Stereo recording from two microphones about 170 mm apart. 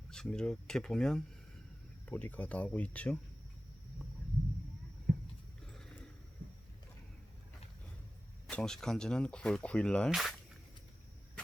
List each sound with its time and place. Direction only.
0.1 s speech: 5° left (ahead or behind)
5.1 s a sound: 55° right (ahead or behind)
5.6 s horse: 5° left (ahead or behind)
8.4 s speech: 5° left (ahead or behind)